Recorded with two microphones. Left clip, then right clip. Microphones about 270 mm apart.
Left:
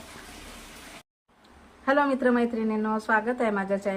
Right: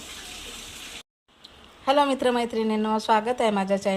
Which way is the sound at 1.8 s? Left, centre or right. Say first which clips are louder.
Right 2 dB; right.